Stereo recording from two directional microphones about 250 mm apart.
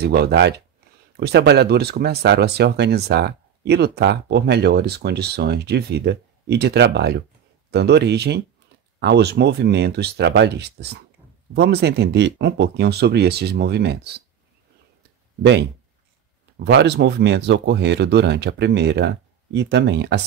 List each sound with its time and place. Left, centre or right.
0.0 s speech: right
16.6 s speech: right